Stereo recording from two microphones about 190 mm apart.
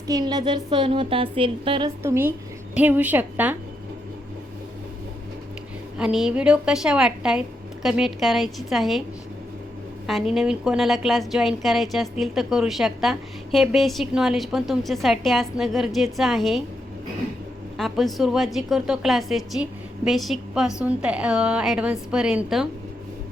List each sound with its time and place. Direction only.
0.1 s speech: 20° right (ahead or behind)
2.0 s a woman's voice: 10° right (ahead or behind)
6.0 s a woman's voice: 5° right (ahead or behind)
10.1 s a woman's voice: centre (ahead or behind)
17.7 s a woman's voice: centre (ahead or behind)